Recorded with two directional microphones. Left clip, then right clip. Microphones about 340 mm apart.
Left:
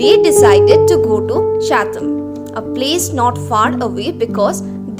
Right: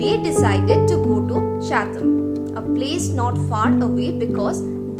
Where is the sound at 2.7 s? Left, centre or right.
Left.